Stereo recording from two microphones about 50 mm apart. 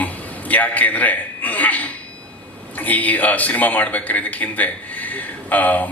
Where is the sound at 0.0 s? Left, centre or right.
Left.